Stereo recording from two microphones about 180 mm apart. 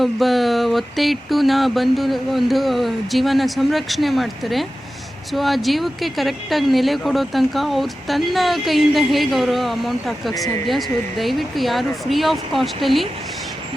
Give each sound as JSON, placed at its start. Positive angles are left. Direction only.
{"t": 0.0, "sound": "speech", "side_deg": 0}